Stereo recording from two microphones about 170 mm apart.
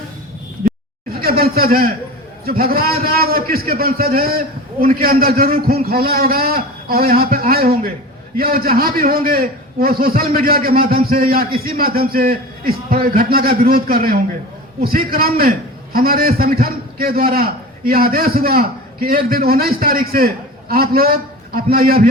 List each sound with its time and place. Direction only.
1.2 s a man's voice: 60° right (ahead or behind)